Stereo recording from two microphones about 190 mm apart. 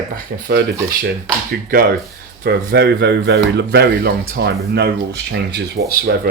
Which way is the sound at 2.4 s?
50° right (ahead or behind).